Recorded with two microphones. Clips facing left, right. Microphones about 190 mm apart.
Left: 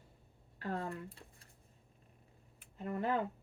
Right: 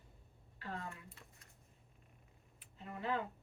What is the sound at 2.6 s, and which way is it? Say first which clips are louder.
Speech: left 9 dB; 50° left (ahead or behind).